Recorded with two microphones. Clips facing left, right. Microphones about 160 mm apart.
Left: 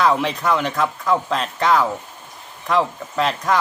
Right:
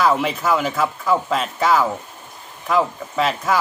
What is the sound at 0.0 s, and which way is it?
Speech, 5° right (ahead or behind).